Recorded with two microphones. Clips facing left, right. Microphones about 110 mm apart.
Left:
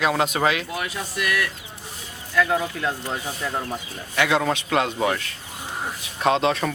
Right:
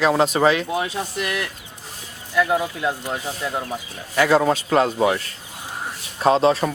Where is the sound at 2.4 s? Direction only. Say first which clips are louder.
Right 2 dB; 15° right (ahead or behind).